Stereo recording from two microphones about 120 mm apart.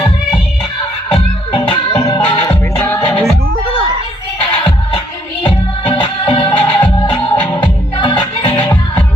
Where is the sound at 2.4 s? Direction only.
15° left (ahead or behind).